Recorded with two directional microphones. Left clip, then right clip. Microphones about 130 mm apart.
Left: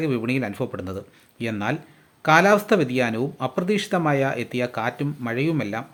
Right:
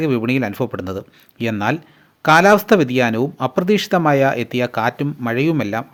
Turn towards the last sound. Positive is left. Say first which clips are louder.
# right 6 dB
turn(degrees=-40)  # may be behind; listen again after turning